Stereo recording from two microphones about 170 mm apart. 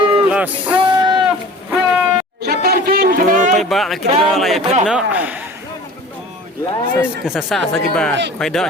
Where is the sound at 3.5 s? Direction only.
Centre (ahead or behind).